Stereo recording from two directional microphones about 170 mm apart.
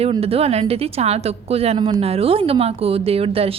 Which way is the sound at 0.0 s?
35° right (ahead or behind).